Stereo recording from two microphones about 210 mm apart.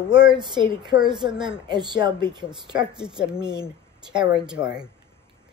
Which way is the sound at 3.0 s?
5° right (ahead or behind).